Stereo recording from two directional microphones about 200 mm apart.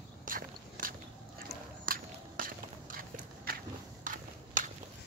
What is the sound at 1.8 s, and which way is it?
Walk, 45° right (ahead or behind).